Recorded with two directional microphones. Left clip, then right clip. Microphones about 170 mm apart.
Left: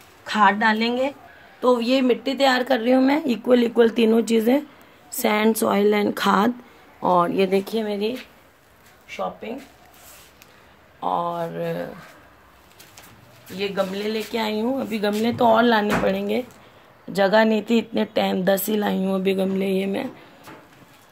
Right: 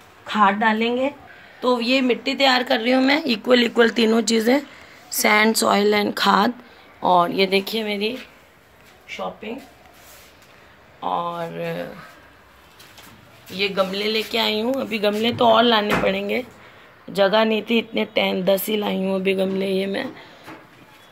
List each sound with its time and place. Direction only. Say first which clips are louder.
0.3 s a woman's voice: even; 5° left (ahead or behind)
1.6 s speech: even; 30° left (ahead or behind)
11.0 s speech: left 1 dB; 30° left (ahead or behind)
13.6 s speech: right 3 dB; 45° left (ahead or behind)